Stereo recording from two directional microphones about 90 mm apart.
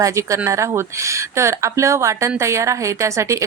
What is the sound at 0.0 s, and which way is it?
A woman's voice, 35° right (ahead or behind).